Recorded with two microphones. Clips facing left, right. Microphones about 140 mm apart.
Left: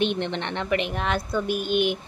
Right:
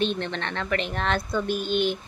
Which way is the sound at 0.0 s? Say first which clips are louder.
Left 2 dB; 20° left (ahead or behind).